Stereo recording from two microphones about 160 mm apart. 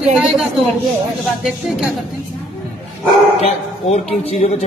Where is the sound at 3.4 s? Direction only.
40° left (ahead or behind).